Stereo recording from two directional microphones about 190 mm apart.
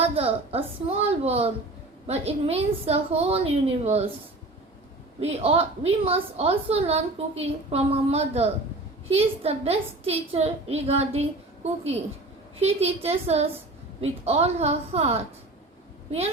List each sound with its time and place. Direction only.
0.0 s a woman's voice: 30° right (ahead or behind)
5.2 s a woman's voice: 35° right (ahead or behind)